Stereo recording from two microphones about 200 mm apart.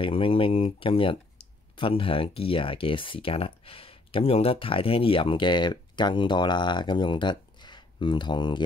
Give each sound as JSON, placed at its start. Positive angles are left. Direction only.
{"t": 0.0, "sound": "speech", "side_deg": 25}